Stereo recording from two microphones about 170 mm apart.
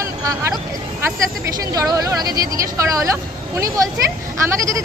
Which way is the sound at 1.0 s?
20° right (ahead or behind).